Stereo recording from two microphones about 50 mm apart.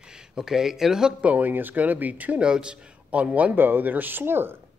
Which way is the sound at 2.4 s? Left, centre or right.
Centre.